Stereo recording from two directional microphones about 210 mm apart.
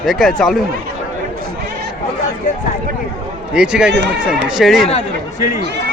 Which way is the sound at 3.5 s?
5° right (ahead or behind).